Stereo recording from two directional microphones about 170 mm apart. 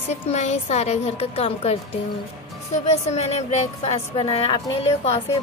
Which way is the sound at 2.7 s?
45° left (ahead or behind).